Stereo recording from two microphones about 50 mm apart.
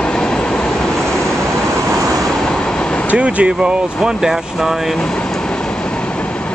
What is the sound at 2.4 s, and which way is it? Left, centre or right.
Train, centre.